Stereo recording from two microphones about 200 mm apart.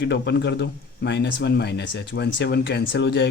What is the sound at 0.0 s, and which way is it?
Speech, 60° left (ahead or behind).